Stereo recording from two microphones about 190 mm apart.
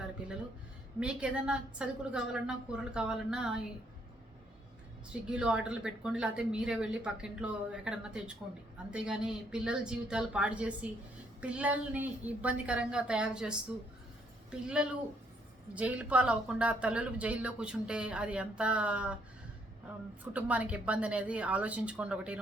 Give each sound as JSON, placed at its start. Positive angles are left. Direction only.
{"t": 0.9, "sound": "speech", "side_deg": -5}
{"t": 5.3, "sound": "speech", "side_deg": -5}
{"t": 20.3, "sound": "a woman's voice", "side_deg": -5}